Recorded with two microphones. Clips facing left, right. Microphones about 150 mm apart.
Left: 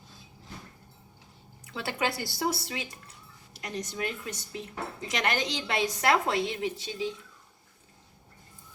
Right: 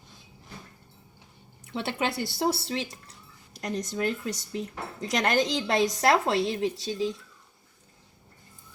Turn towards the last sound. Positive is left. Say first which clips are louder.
# right 4 dB
turn(degrees=-35)  # may be behind; listen again after turning